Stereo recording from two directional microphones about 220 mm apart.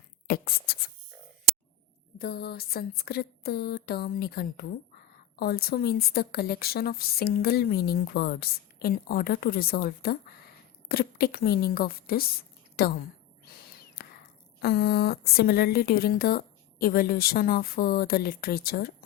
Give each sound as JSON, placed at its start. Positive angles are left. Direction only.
{"t": 0.3, "sound": "speech", "side_deg": 40}
{"t": 2.1, "sound": "speech", "side_deg": 45}
{"t": 13.4, "sound": "owl", "side_deg": 45}
{"t": 14.6, "sound": "speech", "side_deg": 45}